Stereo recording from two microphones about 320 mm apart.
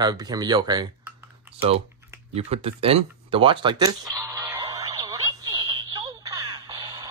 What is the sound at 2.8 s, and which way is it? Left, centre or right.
Music, centre.